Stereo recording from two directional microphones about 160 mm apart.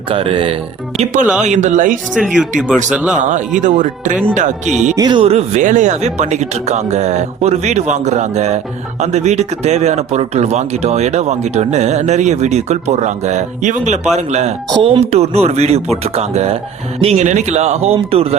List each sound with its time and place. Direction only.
0.1 s speech: 35° right (ahead or behind)
1.2 s speech: 5° right (ahead or behind)
1.5 s speech: 50° right (ahead or behind)
2.1 s speech: 5° right (ahead or behind)
3.2 s speech: 50° right (ahead or behind)
4.9 s speech: 25° right (ahead or behind)
5.2 s speech: 40° right (ahead or behind)
14.7 s speech: 30° right (ahead or behind)